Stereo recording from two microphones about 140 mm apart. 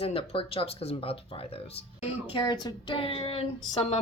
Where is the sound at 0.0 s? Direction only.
40° left (ahead or behind).